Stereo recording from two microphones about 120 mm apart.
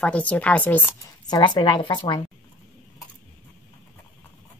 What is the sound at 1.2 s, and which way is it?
A woman's voice, 40° left (ahead or behind).